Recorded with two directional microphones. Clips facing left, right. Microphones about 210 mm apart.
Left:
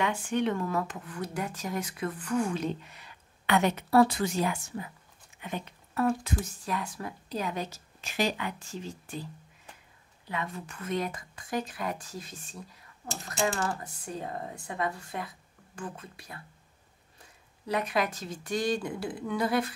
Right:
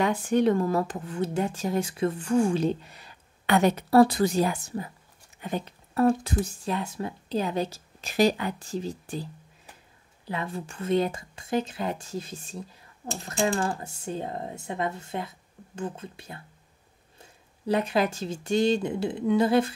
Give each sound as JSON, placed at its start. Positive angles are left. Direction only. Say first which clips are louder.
{"t": 0.0, "sound": "speech", "louder": "right 6 dB", "side_deg": -40}